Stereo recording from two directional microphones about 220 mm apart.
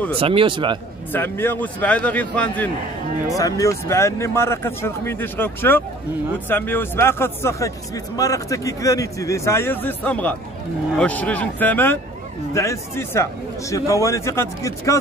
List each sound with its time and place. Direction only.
0.2 s speech: 25° right (ahead or behind)
1.1 s a man's voice: 10° left (ahead or behind)